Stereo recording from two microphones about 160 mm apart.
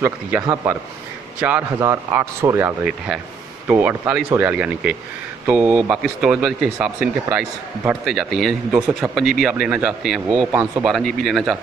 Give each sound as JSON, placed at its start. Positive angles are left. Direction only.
{"t": 0.0, "sound": "speech", "side_deg": -15}
{"t": 8.0, "sound": "speech", "side_deg": 0}